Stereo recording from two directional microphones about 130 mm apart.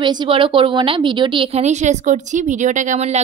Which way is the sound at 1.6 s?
60° right (ahead or behind).